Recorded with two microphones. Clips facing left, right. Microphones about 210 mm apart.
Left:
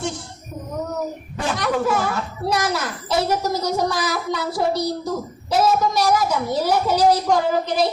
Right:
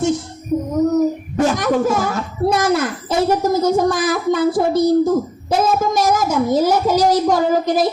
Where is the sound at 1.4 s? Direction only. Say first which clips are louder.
Right 6 dB; 45° right (ahead or behind).